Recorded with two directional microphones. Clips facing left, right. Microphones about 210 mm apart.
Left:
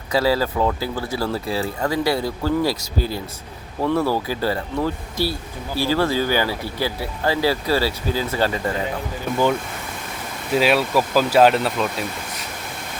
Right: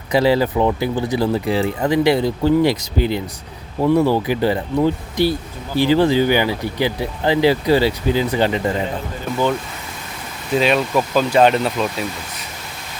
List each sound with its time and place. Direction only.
0.1 s speech: 20° right (ahead or behind)
10.5 s speech: 5° left (ahead or behind)